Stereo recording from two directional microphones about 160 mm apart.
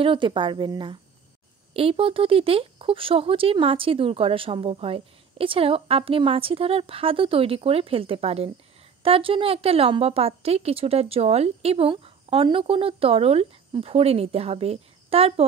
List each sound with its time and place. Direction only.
0.0 s speech: 30° right (ahead or behind)